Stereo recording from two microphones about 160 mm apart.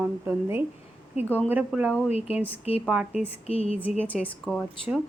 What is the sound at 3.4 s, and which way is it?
Speech, 40° left (ahead or behind).